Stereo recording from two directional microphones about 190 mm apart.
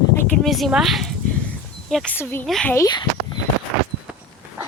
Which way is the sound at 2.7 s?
20° left (ahead or behind).